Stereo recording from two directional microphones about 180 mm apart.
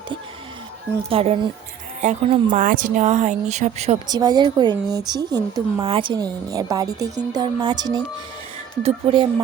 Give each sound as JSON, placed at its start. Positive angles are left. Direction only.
{"t": 1.1, "sound": "speech", "side_deg": -35}
{"t": 4.1, "sound": "a woman's voice", "side_deg": -20}